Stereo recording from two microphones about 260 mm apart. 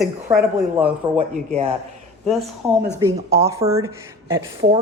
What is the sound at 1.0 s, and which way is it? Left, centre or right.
Speech, centre.